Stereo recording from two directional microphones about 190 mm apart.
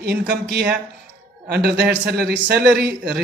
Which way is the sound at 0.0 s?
60° right (ahead or behind).